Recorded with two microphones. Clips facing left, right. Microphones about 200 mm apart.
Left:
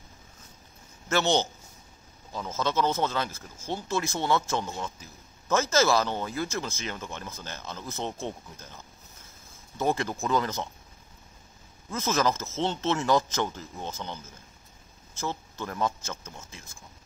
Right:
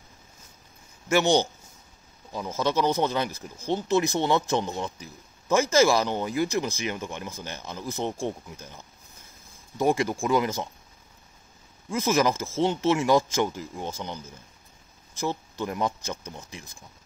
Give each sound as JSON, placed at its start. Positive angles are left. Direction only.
{"t": 1.0, "sound": "a man's voice", "side_deg": -15}
{"t": 11.9, "sound": "speech", "side_deg": -15}